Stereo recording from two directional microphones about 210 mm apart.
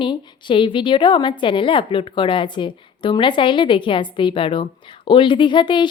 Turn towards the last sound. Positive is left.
turn(degrees=20)  # may be behind; listen again after turning